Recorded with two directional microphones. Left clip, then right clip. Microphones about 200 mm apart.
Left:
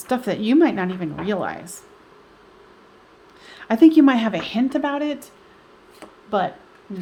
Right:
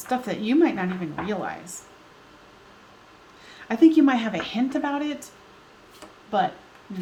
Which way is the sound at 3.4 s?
50° left (ahead or behind).